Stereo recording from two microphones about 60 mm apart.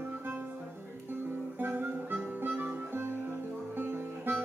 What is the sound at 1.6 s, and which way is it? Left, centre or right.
Music, right.